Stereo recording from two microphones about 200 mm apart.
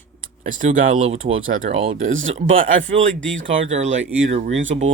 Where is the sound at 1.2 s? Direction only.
80° right.